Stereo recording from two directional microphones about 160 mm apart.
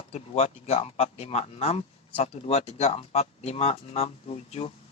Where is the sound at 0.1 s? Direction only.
40° left (ahead or behind).